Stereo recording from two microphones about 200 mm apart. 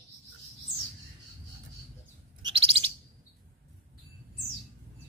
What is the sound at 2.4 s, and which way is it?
Bird, 25° right (ahead or behind).